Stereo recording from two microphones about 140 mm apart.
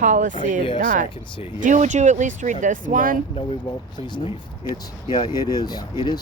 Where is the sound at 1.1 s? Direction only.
40° left (ahead or behind).